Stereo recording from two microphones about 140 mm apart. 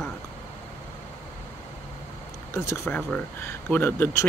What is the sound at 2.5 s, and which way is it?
Speech, 20° left (ahead or behind).